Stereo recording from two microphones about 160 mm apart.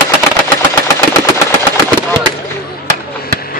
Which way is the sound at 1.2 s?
15° left (ahead or behind).